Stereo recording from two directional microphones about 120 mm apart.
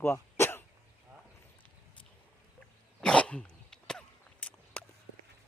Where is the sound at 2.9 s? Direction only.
10° left (ahead or behind).